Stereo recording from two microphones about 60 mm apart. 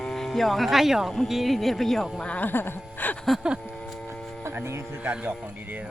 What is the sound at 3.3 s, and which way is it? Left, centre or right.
Vehicle, centre.